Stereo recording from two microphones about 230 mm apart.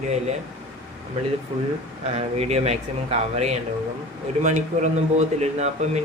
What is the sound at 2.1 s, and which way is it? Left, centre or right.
A man's voice, right.